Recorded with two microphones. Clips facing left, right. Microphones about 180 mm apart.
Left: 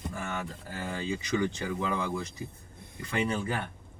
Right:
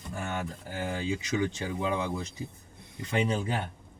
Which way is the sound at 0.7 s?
15° right (ahead or behind).